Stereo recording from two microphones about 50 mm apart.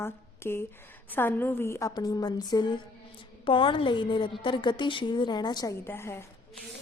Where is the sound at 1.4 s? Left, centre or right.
Left.